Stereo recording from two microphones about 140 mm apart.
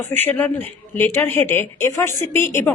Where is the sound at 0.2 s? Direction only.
15° left (ahead or behind).